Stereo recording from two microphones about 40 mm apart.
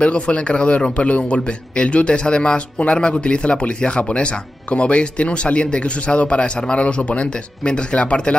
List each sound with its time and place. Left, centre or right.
0.0 s a man's voice: left